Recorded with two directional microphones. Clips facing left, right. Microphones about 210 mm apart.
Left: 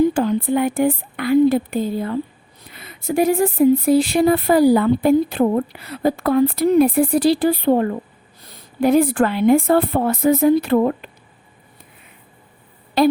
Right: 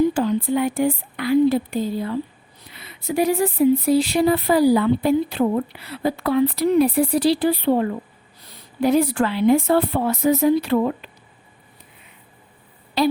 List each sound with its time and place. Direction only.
0.1 s speech: 55° left (ahead or behind)
13.0 s a woman's voice: 50° left (ahead or behind)